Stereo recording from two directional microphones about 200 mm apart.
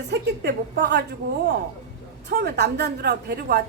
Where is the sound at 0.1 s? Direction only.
55° right (ahead or behind).